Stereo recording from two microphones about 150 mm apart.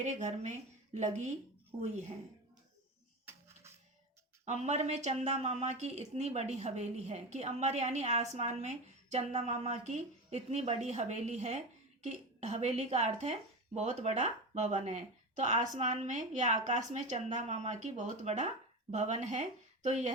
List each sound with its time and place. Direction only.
0.0 s speech: 50° right (ahead or behind)
4.4 s speech: 50° right (ahead or behind)